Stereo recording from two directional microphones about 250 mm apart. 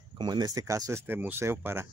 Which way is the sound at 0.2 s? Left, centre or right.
Centre.